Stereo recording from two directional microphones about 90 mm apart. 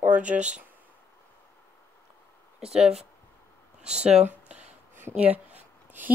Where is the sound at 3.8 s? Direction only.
10° right (ahead or behind).